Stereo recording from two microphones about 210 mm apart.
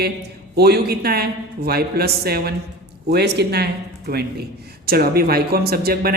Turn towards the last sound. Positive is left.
turn(degrees=-45)  # may be behind; listen again after turning